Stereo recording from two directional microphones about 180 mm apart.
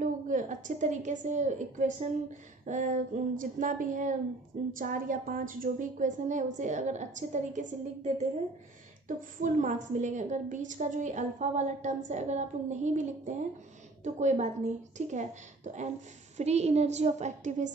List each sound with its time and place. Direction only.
0.0 s a woman's voice: 45° right (ahead or behind)